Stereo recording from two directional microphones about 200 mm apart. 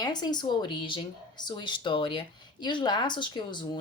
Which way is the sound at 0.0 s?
20° left (ahead or behind).